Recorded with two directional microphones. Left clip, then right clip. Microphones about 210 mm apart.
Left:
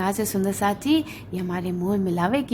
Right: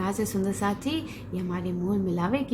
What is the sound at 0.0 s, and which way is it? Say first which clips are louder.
A woman's voice: left 4 dB; 45° left (ahead or behind).